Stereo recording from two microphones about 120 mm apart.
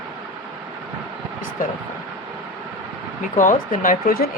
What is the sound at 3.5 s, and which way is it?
Speech, 90° left.